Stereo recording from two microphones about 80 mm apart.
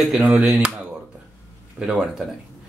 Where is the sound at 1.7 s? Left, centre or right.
Centre.